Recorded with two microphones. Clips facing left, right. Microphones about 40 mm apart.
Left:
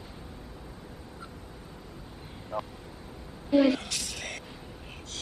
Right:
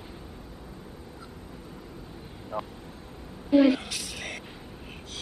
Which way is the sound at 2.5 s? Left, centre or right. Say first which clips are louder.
Right 1 dB; centre.